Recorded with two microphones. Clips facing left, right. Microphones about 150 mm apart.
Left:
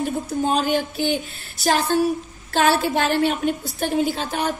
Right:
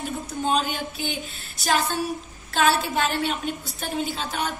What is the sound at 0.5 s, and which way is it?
Speech, 45° left (ahead or behind).